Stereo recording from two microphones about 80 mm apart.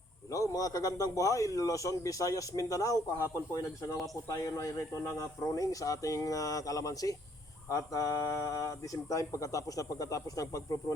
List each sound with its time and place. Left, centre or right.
0.3 s a man's voice: left